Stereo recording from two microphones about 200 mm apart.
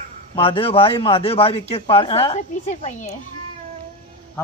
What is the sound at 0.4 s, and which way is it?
A man's voice, 25° left (ahead or behind).